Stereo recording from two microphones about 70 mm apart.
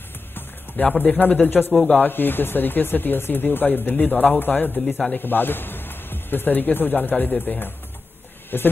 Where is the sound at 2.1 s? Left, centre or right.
Left.